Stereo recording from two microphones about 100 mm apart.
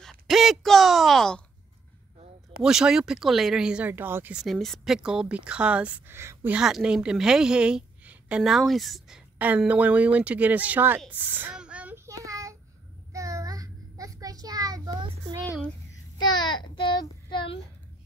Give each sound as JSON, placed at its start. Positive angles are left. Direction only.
{"t": 0.0, "sound": "a sound", "side_deg": 0}
{"t": 2.6, "sound": "speech", "side_deg": -5}
{"t": 3.9, "sound": "a woman's voice", "side_deg": -20}
{"t": 4.3, "sound": "a woman's voice", "side_deg": 0}
{"t": 6.1, "sound": "a woman's voice", "side_deg": -25}
{"t": 6.5, "sound": "a woman's voice", "side_deg": -10}
{"t": 9.6, "sound": "a woman's voice", "side_deg": -15}
{"t": 11.5, "sound": "child singing", "side_deg": -10}
{"t": 12.1, "sound": "child singing", "side_deg": -35}
{"t": 16.2, "sound": "child singing", "side_deg": 45}